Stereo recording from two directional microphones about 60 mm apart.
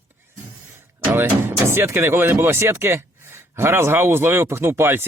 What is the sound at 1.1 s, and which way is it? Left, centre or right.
Speech, right.